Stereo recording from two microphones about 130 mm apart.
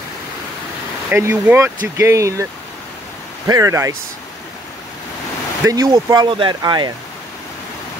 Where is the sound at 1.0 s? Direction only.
20° right (ahead or behind).